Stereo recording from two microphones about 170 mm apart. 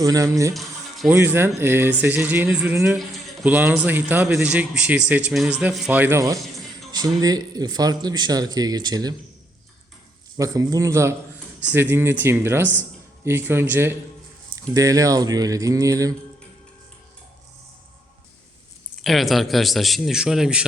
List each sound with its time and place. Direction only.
0.0 s speech: 20° right (ahead or behind)
0.5 s music: centre (ahead or behind)
1.1 s speech: 15° right (ahead or behind)
10.3 s speech: 20° right (ahead or behind)
19.0 s a man's voice: centre (ahead or behind)